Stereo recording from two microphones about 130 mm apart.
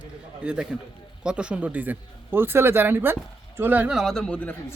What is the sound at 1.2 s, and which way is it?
A man's voice, 5° right (ahead or behind).